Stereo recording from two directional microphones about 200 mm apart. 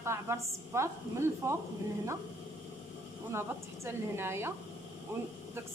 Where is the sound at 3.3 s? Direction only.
15° right (ahead or behind).